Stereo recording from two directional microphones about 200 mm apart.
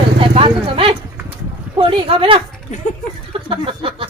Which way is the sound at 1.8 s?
25° right (ahead or behind).